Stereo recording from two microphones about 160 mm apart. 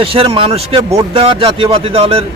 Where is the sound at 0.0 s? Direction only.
35° right (ahead or behind).